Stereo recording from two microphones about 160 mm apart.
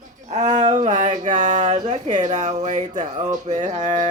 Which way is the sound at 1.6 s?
30° right (ahead or behind).